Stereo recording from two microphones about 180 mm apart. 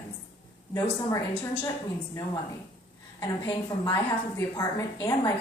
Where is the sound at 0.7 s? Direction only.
20° left (ahead or behind).